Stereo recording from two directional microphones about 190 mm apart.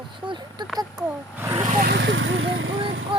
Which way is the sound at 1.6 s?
40° right (ahead or behind).